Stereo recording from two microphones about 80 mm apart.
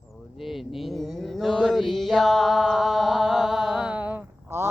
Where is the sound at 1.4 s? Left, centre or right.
Centre.